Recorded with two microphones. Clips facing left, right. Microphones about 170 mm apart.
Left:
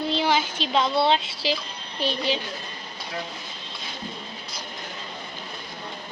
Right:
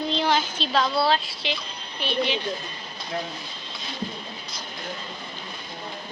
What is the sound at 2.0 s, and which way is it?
Speech, 40° left (ahead or behind).